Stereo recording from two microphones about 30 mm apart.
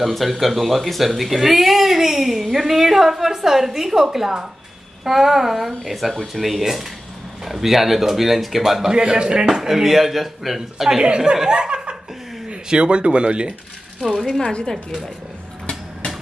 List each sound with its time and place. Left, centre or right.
0.0 s speech: centre
8.9 s a man's voice: right
9.5 s speech: centre
11.0 s a man's voice: right
11.4 s laughter: right
12.6 s speech: right
14.5 s a woman's voice: left